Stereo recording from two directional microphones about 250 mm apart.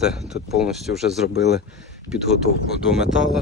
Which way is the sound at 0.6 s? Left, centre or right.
Centre.